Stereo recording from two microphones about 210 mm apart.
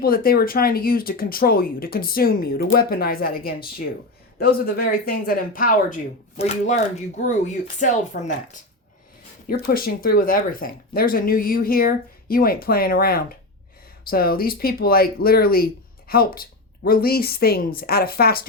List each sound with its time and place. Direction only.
0.0 s speech: 45° left (ahead or behind)
9.5 s speech: 45° left (ahead or behind)